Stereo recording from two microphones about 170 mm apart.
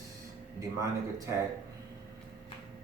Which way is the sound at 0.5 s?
20° right (ahead or behind).